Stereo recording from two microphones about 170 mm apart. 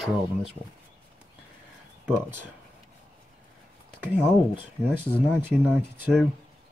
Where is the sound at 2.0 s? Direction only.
10° right (ahead or behind).